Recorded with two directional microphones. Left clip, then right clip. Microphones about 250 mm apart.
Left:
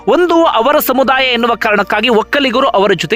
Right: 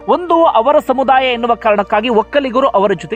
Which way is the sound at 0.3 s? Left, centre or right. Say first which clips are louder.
Even; left.